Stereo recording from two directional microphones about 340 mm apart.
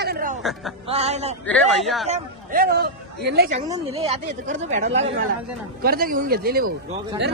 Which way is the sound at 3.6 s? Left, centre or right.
Centre.